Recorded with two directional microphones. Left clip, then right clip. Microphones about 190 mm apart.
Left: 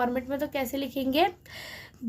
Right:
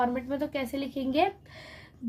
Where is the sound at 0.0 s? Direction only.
20° left (ahead or behind).